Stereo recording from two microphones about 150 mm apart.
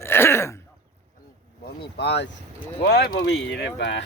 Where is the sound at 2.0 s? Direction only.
90° left.